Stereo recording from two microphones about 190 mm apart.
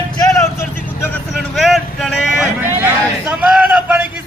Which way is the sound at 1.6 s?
Centre (ahead or behind).